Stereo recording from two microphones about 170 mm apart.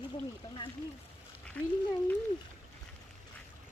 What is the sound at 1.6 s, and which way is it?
Speech, 10° left (ahead or behind).